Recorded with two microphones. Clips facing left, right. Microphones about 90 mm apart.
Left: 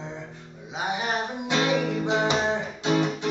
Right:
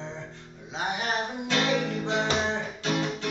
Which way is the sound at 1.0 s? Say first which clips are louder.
Left 1 dB; 15° left (ahead or behind).